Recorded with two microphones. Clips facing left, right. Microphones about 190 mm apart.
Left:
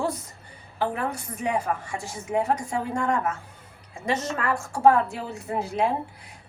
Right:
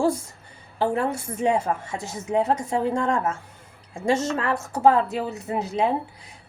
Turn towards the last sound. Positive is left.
turn(degrees=-20)  # may be behind; listen again after turning